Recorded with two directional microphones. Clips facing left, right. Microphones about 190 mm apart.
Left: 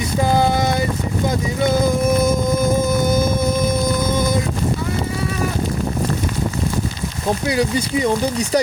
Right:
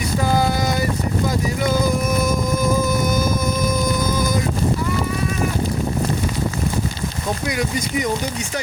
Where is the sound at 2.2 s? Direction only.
25° left (ahead or behind).